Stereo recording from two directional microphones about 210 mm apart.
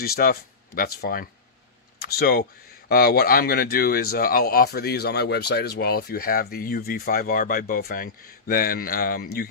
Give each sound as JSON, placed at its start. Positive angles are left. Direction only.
{"t": 0.0, "sound": "speech", "side_deg": 45}